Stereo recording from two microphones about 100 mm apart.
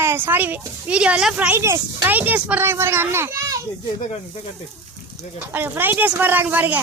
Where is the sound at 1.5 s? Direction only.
25° right (ahead or behind).